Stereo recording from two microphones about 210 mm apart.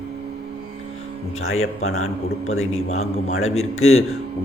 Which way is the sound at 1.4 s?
80° left.